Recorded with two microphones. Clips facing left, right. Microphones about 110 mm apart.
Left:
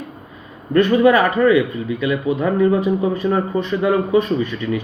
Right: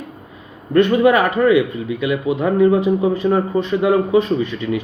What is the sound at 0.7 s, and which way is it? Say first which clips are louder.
Speech: even; 25° right (ahead or behind).